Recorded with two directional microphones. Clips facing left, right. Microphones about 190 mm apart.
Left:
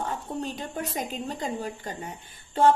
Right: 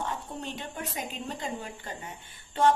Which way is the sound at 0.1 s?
40° left (ahead or behind).